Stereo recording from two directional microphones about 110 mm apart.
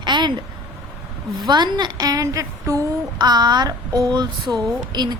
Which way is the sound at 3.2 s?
40° right (ahead or behind).